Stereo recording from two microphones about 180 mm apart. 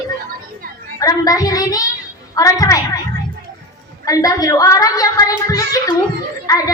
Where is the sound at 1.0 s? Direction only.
20° left (ahead or behind).